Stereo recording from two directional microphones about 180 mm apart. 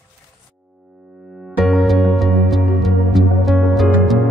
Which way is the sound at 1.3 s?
Centre (ahead or behind).